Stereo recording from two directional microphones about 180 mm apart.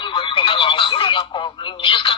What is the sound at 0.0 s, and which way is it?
Telephone, 25° left (ahead or behind).